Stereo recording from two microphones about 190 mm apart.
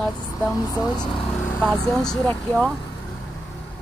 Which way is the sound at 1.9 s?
5° left (ahead or behind).